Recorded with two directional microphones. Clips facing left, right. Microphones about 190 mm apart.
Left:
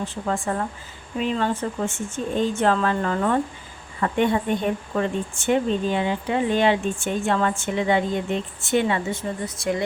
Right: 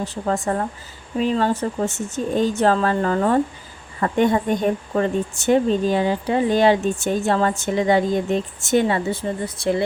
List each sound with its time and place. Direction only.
0.0 s speech: 40° right (ahead or behind)